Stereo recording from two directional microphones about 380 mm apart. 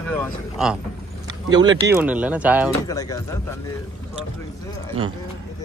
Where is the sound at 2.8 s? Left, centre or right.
Centre.